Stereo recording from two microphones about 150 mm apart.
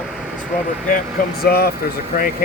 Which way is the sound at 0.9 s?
90° left.